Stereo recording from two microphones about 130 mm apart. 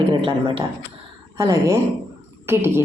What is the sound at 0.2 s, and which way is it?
Speech, 40° right (ahead or behind).